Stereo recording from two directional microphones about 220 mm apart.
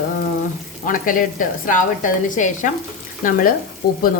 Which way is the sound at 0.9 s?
40° left (ahead or behind).